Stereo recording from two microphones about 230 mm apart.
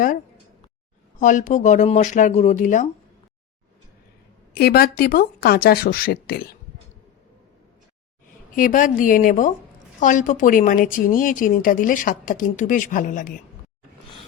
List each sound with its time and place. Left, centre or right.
1.2 s a woman's voice: left
4.5 s a woman's voice: left
8.5 s a woman's voice: left